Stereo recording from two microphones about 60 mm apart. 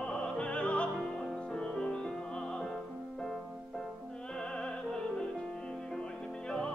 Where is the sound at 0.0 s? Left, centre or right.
Centre.